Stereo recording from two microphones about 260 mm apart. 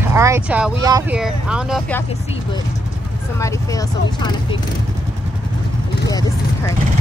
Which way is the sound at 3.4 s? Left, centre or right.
Centre.